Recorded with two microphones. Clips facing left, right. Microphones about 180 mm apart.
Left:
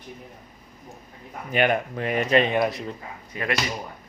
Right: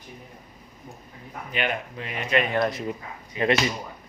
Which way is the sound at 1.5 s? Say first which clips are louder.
Left 7 dB; 50° left (ahead or behind).